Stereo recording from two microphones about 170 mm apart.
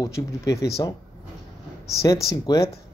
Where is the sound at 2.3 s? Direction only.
20° left (ahead or behind).